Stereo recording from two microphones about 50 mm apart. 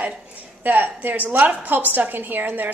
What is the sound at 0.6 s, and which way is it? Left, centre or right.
A woman's voice, right.